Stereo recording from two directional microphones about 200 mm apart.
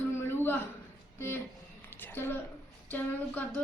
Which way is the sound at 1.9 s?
10° left (ahead or behind).